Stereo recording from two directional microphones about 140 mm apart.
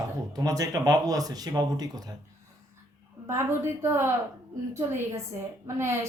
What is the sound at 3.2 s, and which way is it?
Speech, 20° right (ahead or behind).